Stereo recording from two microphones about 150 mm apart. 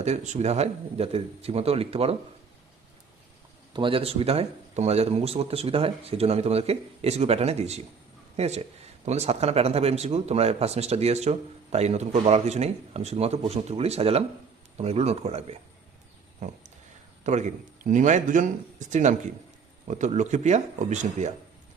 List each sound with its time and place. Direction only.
0.0 s speech: 45° right (ahead or behind)
3.7 s speech: 35° right (ahead or behind)
17.2 s speech: 55° right (ahead or behind)